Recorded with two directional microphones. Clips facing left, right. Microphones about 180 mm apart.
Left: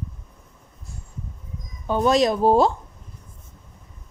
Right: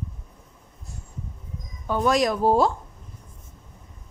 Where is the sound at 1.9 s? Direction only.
25° left (ahead or behind).